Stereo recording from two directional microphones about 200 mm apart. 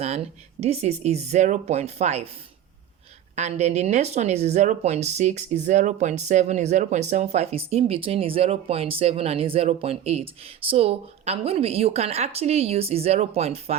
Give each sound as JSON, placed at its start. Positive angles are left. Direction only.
{"t": 0.0, "sound": "speech", "side_deg": -30}
{"t": 3.3, "sound": "speech", "side_deg": -35}